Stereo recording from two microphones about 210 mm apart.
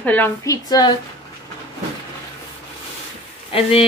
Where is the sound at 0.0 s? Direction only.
10° left (ahead or behind).